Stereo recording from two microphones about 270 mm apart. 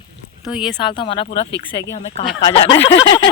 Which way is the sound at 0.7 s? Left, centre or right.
Centre.